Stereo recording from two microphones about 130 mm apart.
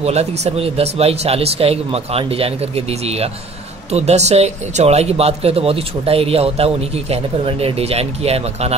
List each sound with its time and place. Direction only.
0.0 s speech: 55° right (ahead or behind)